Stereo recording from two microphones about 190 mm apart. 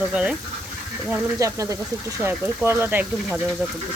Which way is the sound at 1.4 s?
15° right (ahead or behind).